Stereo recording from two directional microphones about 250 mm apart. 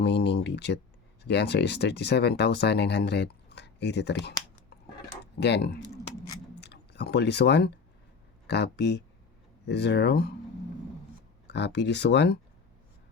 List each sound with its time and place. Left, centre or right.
0.0 s speech: left
6.6 s a sound: left
8.4 s speech: left
11.4 s speech: left